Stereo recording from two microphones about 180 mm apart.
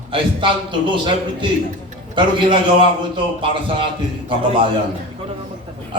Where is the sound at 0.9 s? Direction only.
25° right (ahead or behind).